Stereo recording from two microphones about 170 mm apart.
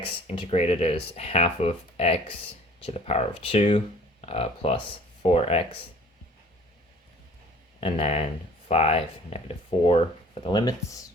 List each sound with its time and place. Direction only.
0.0 s speech: 35° left (ahead or behind)
7.8 s speech: 35° left (ahead or behind)